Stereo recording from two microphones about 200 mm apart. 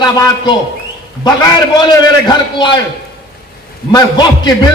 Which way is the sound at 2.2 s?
20° left (ahead or behind).